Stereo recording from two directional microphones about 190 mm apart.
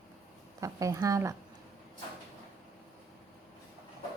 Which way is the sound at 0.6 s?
15° right (ahead or behind).